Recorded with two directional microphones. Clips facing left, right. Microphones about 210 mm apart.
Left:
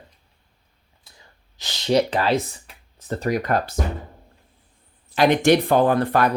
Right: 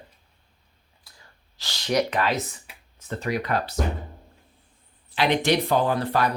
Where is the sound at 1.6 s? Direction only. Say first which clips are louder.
Left 4 dB; 20° left (ahead or behind).